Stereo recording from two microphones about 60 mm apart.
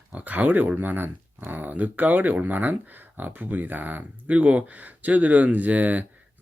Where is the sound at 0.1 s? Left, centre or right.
Right.